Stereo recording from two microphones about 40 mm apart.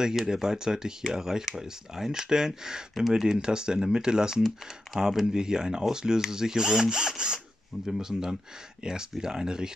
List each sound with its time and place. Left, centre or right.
0.0 s speech: centre